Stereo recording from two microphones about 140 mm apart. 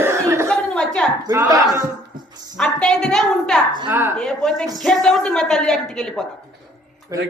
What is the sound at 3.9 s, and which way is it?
Speech, 15° right (ahead or behind).